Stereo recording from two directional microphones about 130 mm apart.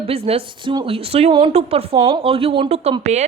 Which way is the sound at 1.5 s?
50° right (ahead or behind).